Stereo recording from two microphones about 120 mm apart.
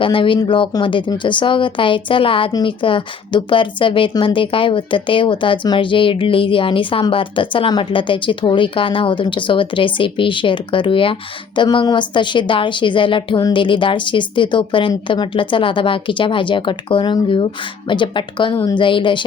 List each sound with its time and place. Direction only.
0.0 s speech: 45° left (ahead or behind)
2.5 s a woman's voice: 35° left (ahead or behind)
2.8 s speech: 45° left (ahead or behind)